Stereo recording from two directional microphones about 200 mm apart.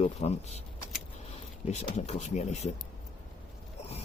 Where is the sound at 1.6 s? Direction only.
35° left (ahead or behind).